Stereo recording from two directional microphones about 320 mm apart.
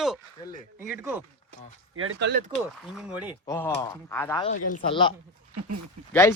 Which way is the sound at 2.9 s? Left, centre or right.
Centre.